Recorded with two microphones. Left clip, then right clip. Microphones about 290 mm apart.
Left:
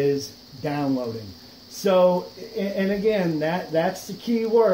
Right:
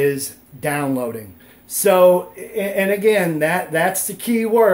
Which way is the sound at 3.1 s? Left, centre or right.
Right.